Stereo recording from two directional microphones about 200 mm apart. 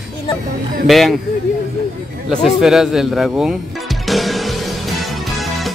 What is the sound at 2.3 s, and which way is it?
Music, centre (ahead or behind).